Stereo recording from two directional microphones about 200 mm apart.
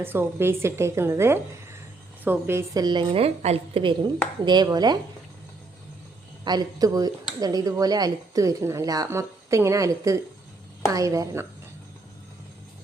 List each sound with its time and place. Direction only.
0.0 s a woman's voice: 10° right (ahead or behind)
6.4 s speech: 20° right (ahead or behind)